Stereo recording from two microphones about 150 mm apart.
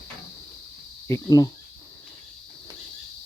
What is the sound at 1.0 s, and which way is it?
Speech, 20° left (ahead or behind).